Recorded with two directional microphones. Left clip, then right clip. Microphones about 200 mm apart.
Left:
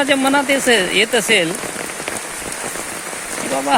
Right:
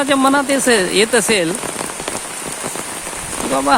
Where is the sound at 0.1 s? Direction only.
20° right (ahead or behind).